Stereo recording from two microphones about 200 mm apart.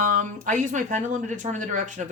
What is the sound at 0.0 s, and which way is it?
Speech, 40° right (ahead or behind).